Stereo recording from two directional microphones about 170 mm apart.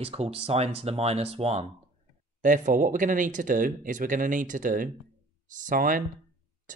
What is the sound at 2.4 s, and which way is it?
Speech, 50° right (ahead or behind).